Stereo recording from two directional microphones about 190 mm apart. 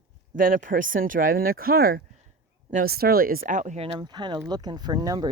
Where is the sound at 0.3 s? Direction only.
45° right (ahead or behind).